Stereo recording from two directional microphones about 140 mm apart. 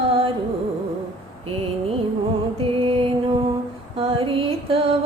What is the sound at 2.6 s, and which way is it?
Music, 40° right (ahead or behind).